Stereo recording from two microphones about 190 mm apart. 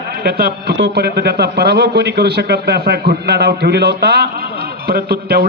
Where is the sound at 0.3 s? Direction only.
55° right (ahead or behind).